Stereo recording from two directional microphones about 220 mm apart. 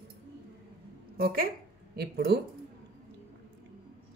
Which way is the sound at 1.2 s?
40° right (ahead or behind).